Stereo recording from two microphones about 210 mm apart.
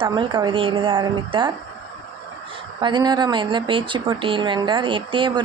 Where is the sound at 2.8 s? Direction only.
20° right (ahead or behind).